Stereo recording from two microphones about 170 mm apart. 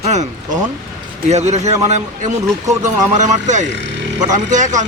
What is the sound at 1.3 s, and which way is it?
A man's voice, 40° right (ahead or behind).